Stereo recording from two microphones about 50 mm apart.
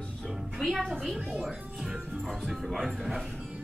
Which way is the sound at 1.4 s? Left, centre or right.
Centre.